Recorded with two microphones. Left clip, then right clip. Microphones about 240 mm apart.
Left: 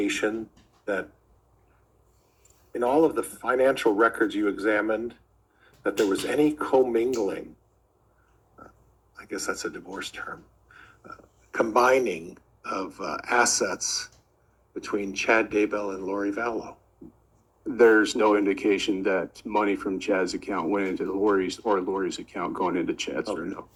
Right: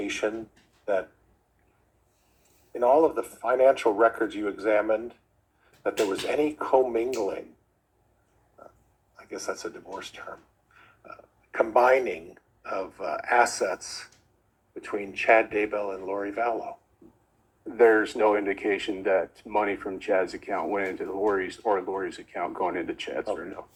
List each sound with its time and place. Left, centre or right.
0.0 s speech: left
2.7 s speech: left
9.1 s speech: left
10.8 s a sound: left
12.6 s speech: left
15.2 s speech: left